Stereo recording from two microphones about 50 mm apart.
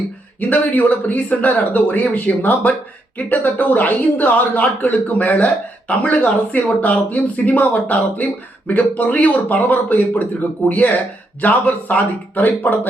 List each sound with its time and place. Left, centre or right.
0.3 s speech: left